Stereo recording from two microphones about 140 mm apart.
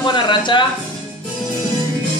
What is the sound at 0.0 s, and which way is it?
Speech, 35° left (ahead or behind).